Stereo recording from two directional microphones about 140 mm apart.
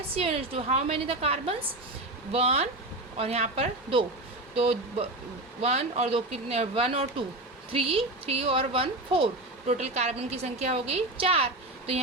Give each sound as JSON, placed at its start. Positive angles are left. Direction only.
{"t": 0.1, "sound": "speech", "side_deg": -45}